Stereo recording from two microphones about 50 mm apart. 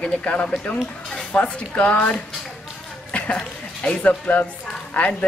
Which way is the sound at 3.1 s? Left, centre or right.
Left.